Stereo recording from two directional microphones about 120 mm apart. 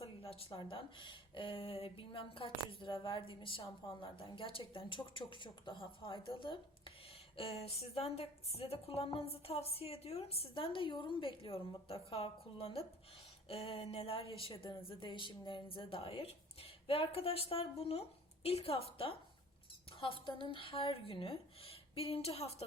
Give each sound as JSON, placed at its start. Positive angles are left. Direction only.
{"t": 0.0, "sound": "speech", "side_deg": 50}